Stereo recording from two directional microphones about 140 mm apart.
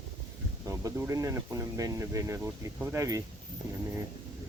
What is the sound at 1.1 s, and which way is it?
Speech, 25° right (ahead or behind).